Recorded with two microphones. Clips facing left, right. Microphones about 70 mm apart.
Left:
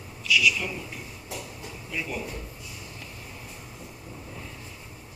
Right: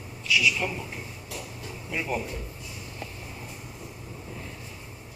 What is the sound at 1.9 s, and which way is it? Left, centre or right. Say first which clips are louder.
Speech: right 3 dB; right.